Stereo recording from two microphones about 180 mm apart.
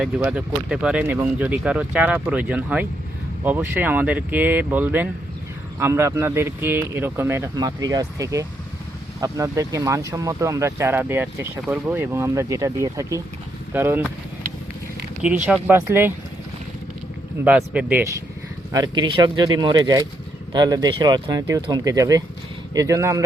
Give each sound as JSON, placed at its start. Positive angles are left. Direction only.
{"t": 0.0, "sound": "speech", "side_deg": -5}
{"t": 15.2, "sound": "speech", "side_deg": -10}
{"t": 17.4, "sound": "speech", "side_deg": -10}
{"t": 18.7, "sound": "speech", "side_deg": -20}